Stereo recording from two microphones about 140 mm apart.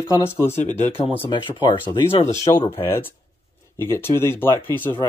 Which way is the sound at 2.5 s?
20° left (ahead or behind).